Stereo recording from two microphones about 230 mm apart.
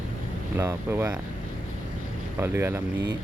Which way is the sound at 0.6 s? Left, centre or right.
Centre.